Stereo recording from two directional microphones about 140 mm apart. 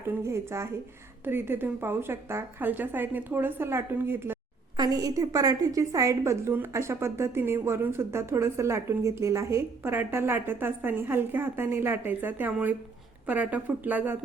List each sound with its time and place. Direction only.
0.3 s a woman's voice: 20° right (ahead or behind)